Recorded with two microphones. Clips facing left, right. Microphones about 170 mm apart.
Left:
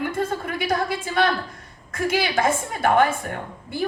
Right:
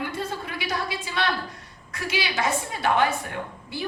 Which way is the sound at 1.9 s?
50° left (ahead or behind).